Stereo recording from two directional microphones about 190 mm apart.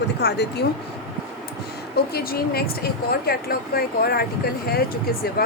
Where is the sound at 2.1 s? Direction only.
55° left (ahead or behind).